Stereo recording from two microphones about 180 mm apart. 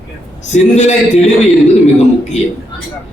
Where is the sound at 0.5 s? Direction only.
40° left (ahead or behind).